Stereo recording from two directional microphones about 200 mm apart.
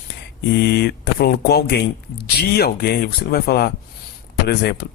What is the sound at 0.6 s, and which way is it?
Speech, 55° left (ahead or behind).